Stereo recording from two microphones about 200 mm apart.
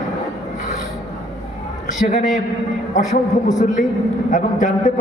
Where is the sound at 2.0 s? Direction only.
35° left (ahead or behind).